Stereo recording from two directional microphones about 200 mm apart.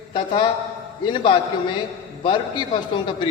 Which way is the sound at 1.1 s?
25° left (ahead or behind).